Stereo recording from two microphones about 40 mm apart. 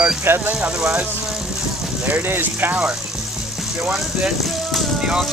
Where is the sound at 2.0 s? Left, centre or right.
Right.